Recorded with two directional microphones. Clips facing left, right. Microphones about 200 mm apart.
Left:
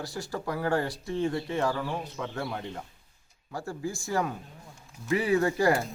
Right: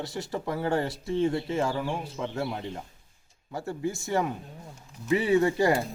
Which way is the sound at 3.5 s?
20° right (ahead or behind).